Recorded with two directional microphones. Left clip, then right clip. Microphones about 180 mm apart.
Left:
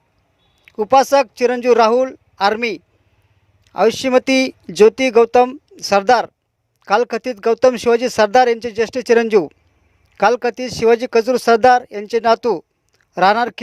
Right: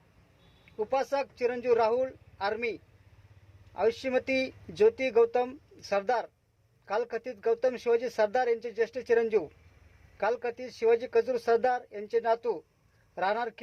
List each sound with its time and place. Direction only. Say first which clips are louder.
0.6 s speech: left 17 dB; 45° left (ahead or behind)